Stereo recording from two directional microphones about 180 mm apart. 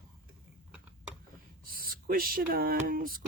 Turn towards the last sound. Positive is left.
turn(degrees=-55)  # may be behind; listen again after turning